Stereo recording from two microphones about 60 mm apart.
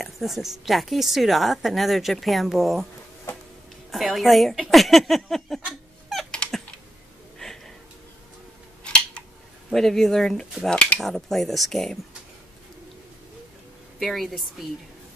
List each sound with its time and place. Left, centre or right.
0.0 s a woman's voice: centre
3.9 s a woman's voice: centre
7.3 s a sound: centre
8.8 s scissors: centre
9.7 s a woman's voice: centre
11.0 s a woman's voice: centre
13.9 s a woman's voice: centre